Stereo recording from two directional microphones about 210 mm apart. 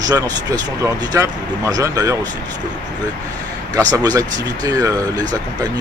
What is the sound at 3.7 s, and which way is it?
Speech, 15° right (ahead or behind).